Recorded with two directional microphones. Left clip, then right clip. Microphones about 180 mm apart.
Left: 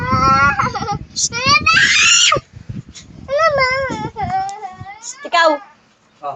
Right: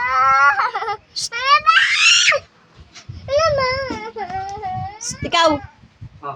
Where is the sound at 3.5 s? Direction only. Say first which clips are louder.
Left 3 dB; 25° left (ahead or behind).